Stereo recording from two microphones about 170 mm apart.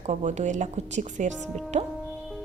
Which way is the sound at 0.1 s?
40° right (ahead or behind).